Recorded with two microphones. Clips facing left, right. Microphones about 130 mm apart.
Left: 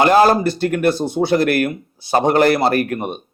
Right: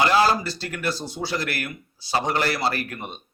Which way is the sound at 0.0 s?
50° left (ahead or behind).